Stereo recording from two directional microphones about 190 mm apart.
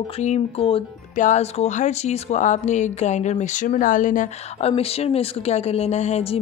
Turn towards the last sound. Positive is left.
turn(degrees=35)  # may be behind; listen again after turning